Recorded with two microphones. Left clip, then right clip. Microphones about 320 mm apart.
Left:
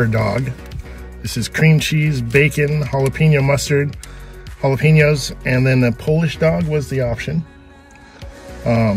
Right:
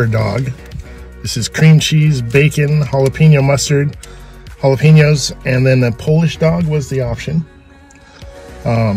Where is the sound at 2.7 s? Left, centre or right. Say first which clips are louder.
Right 4 dB; right.